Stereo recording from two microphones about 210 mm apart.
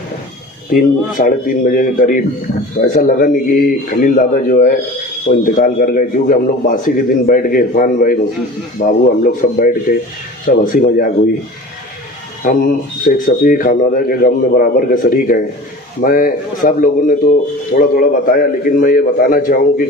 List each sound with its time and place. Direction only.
0.7 s speech: 40° left (ahead or behind)
12.5 s a man's voice: 45° left (ahead or behind)